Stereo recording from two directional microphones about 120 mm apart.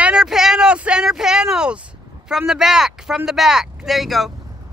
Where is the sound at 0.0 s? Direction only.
5° right (ahead or behind).